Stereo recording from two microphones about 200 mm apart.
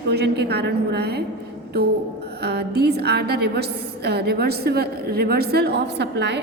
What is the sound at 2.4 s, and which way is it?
A woman's voice, 55° right (ahead or behind).